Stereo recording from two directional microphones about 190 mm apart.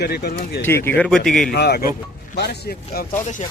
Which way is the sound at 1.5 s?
55° left (ahead or behind).